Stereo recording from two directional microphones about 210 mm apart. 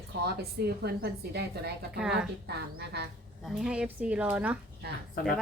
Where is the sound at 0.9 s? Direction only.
50° right (ahead or behind).